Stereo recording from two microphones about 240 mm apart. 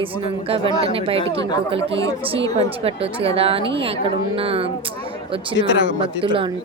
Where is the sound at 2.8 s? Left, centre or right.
Right.